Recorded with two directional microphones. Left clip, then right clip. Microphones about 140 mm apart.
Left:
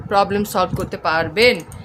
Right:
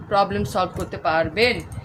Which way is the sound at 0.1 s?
45° left (ahead or behind).